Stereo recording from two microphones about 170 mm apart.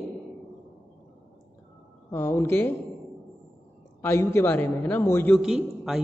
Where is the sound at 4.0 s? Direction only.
15° left (ahead or behind).